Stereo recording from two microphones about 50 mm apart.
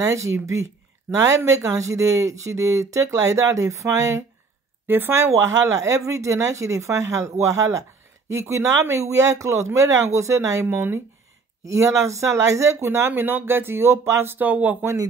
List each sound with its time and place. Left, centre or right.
0.0 s speech: right
4.8 s speech: right
5.1 s speech: right
10.7 s speech: right
11.6 s speech: right
12.8 s speech: right
14.0 s speech: right
14.3 s speech: right